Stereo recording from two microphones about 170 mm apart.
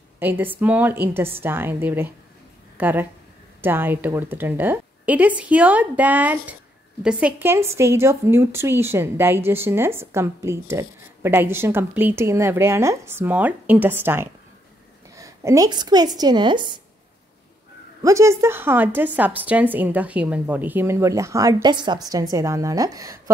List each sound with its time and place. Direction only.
0.2 s a woman's voice: 10° right (ahead or behind); by 16.8 s 25° right (ahead or behind)
18.0 s a woman's voice: 15° right (ahead or behind)